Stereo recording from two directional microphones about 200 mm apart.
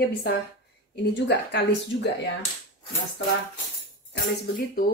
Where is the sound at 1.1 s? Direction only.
60° left (ahead or behind).